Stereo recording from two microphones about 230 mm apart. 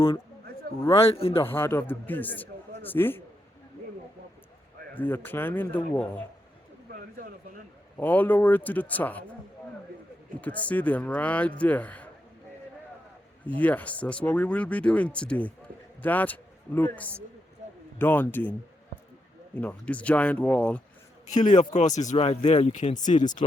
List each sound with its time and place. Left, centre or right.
0.8 s speech: left
1.5 s a man's voice: centre
4.9 s a man's voice: centre
7.9 s a man's voice: centre
10.4 s a man's voice: centre
13.6 s a man's voice: centre
19.5 s a man's voice: centre
21.2 s speech: left